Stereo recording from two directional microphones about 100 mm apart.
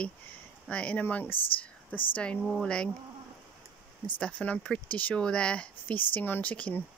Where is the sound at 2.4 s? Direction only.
5° left (ahead or behind).